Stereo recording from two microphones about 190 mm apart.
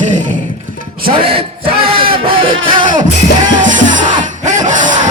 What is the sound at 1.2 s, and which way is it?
Speech, 30° right (ahead or behind).